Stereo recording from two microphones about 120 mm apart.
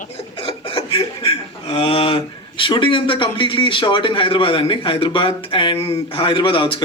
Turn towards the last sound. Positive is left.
turn(degrees=45)  # may be behind; listen again after turning